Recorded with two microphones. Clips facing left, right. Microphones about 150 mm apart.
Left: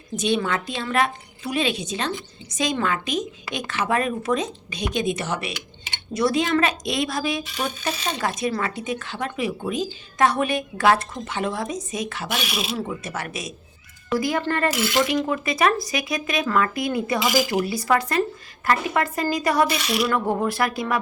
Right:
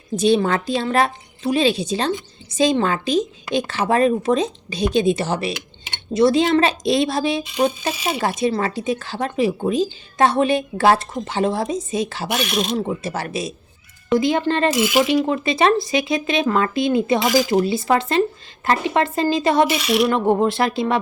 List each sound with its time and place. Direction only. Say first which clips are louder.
0.2 s a woman's voice: right 6 dB; 35° right (ahead or behind)
7.9 s speech: right 4 dB; 10° right (ahead or behind)
8.4 s a woman's voice: right 5 dB; 30° right (ahead or behind)
12.4 s speech: right 6 dB; 5° left (ahead or behind)
12.7 s a woman's voice: right 5 dB; 30° right (ahead or behind)
19.7 s speech: right 5 dB; centre (ahead or behind)
20.1 s speech: right 5 dB; 25° right (ahead or behind)